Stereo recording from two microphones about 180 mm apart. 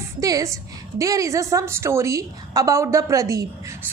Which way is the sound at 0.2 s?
20° right (ahead or behind).